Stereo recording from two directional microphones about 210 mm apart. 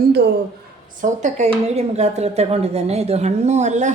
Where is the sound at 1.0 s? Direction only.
35° right (ahead or behind).